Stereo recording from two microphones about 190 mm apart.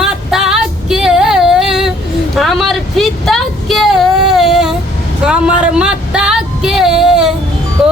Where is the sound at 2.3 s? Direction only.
Centre (ahead or behind).